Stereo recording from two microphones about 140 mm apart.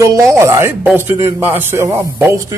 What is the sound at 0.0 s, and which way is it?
A man's voice, 20° right (ahead or behind).